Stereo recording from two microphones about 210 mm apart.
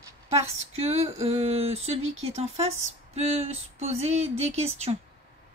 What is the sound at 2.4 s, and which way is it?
Speech, 30° right (ahead or behind).